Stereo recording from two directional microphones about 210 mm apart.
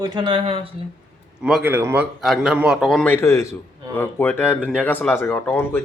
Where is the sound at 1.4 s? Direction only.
5° right (ahead or behind).